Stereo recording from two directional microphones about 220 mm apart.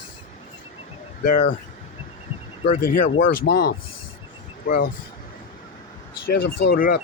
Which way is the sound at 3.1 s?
55° left (ahead or behind).